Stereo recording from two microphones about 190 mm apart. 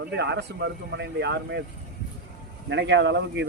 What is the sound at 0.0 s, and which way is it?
Speech, 60° right (ahead or behind).